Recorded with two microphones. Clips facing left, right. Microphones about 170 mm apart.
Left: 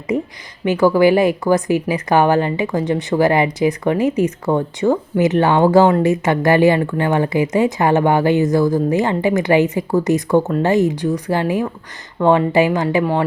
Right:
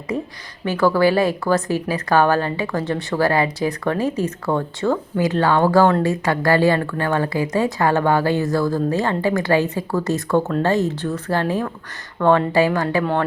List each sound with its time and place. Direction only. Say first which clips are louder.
0.1 s speech: left 5 dB; 15° left (ahead or behind)